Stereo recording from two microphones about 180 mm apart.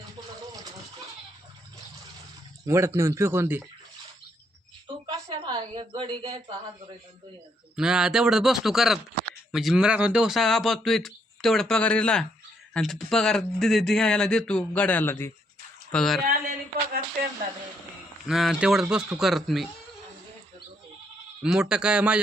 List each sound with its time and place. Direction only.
2.6 s speech: 15° right (ahead or behind)
5.0 s a sound: 25° right (ahead or behind)
7.8 s speech: 5° right (ahead or behind); by 15.3 s 15° left (ahead or behind)
15.9 s speech: centre (ahead or behind)
16.2 s a sound: 55° right (ahead or behind)
18.3 s speech: centre (ahead or behind)
21.4 s speech: 5° right (ahead or behind)